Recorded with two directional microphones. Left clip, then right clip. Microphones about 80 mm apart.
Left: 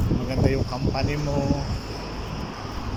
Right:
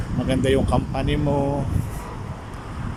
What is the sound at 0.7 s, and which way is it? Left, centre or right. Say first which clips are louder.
Speech: right 3 dB; right.